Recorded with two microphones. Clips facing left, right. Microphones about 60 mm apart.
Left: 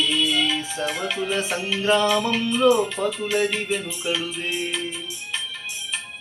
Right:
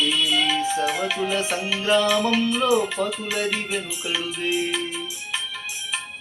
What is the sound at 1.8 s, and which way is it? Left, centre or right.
Music, left.